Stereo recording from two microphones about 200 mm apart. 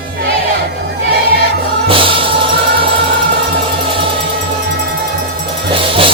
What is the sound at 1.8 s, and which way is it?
Music, 25° right (ahead or behind).